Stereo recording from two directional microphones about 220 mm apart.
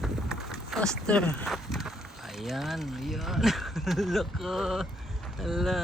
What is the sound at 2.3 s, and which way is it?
Speech, centre (ahead or behind).